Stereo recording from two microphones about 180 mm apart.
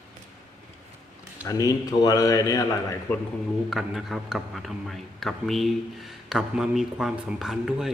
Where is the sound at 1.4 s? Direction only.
20° left (ahead or behind).